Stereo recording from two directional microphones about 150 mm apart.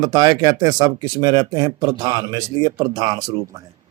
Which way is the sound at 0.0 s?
25° right (ahead or behind).